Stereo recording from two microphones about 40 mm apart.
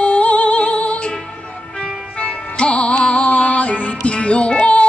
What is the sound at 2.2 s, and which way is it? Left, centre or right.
Music, left.